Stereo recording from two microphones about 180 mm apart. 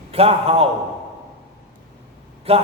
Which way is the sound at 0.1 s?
35° right (ahead or behind).